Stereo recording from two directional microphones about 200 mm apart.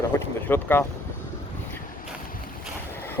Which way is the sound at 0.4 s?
10° left (ahead or behind).